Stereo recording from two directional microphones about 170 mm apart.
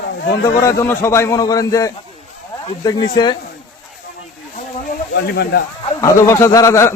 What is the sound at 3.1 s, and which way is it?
Speech, 25° left (ahead or behind).